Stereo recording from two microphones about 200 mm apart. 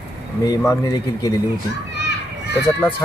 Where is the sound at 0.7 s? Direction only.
15° left (ahead or behind).